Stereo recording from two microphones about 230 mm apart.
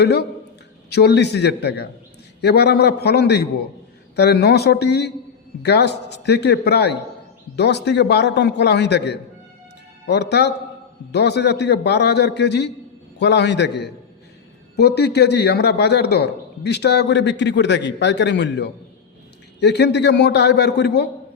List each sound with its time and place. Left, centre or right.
0.0 s a man's voice: left